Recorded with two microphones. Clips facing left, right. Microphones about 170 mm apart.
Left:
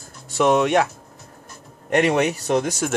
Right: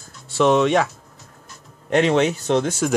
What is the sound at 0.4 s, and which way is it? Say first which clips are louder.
Speech: right 1 dB; 5° left (ahead or behind).